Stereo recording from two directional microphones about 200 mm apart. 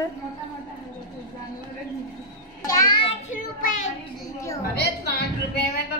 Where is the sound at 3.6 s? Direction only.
40° left (ahead or behind).